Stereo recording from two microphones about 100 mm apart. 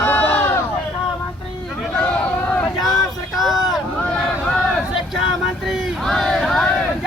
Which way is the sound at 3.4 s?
Centre (ahead or behind).